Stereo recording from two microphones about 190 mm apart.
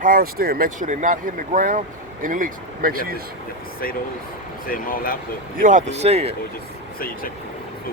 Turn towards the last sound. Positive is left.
turn(degrees=50)  # may be behind; listen again after turning